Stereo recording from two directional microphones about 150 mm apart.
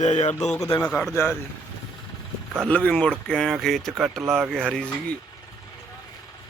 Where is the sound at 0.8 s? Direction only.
10° left (ahead or behind).